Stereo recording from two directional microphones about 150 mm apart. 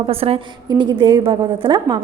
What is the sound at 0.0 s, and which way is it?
A woman's voice, 40° right (ahead or behind).